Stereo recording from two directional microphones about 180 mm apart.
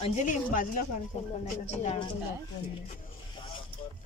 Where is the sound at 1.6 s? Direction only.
35° left (ahead or behind).